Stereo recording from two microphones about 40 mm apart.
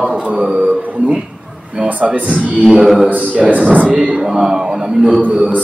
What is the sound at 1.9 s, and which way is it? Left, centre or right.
Speech, right.